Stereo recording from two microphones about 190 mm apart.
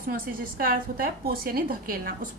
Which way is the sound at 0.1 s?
50° right (ahead or behind).